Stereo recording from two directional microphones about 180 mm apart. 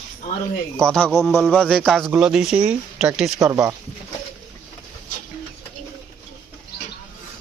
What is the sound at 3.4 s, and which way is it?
Speech, 15° right (ahead or behind).